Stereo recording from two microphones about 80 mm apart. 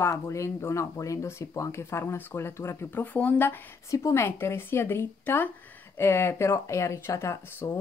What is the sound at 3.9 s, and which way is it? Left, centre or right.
Speech, left.